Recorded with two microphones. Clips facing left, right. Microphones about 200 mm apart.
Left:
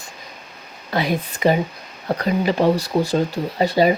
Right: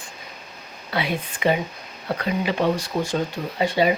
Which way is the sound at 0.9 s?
40° left (ahead or behind).